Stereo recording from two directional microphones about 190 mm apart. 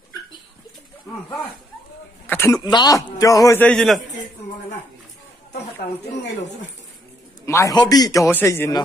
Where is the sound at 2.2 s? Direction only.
15° left (ahead or behind).